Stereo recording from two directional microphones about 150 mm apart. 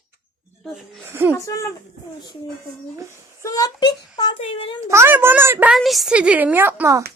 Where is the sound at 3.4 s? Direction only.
25° left (ahead or behind).